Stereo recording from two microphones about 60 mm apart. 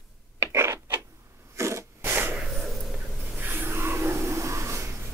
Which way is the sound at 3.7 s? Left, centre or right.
Right.